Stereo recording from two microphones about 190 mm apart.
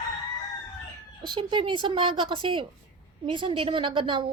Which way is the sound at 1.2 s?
25° right (ahead or behind).